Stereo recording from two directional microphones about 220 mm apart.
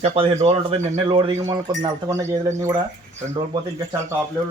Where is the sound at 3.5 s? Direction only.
10° right (ahead or behind).